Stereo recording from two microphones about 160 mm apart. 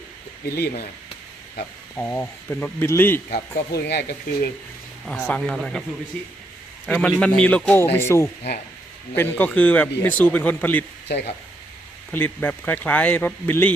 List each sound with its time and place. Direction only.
0.4 s speech: 75° left (ahead or behind)
2.0 s speech: 10° left (ahead or behind)
3.2 s speech: 80° left
5.0 s speech: 5° left (ahead or behind)
6.8 s speech: 5° left (ahead or behind)
12.1 s speech: 10° left (ahead or behind)